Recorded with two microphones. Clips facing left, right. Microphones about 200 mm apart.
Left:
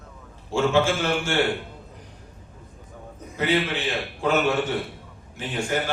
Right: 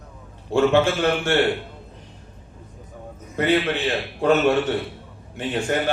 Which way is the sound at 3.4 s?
60° right (ahead or behind).